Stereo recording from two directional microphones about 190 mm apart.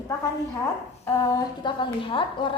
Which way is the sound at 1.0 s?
20° left (ahead or behind).